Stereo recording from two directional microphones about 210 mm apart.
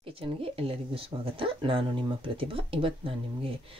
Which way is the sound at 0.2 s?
25° right (ahead or behind).